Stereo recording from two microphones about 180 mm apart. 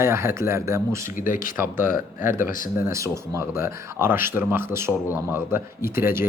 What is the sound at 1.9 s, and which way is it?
Speech, 50° left (ahead or behind).